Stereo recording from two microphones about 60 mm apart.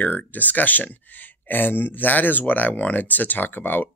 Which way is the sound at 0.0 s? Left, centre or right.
Left.